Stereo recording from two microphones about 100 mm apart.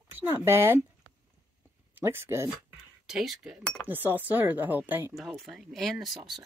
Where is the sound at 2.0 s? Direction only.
25° right (ahead or behind).